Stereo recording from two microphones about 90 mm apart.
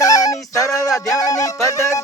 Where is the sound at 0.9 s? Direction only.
Centre (ahead or behind).